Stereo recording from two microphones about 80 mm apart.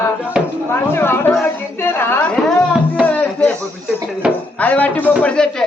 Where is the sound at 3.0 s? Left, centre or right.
Centre.